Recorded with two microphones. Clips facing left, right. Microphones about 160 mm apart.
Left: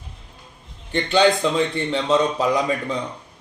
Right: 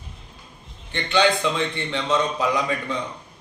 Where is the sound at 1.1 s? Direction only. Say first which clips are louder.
Left 3 dB; 40° left (ahead or behind).